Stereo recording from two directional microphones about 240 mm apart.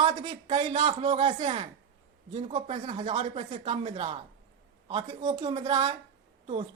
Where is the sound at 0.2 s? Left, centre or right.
Centre.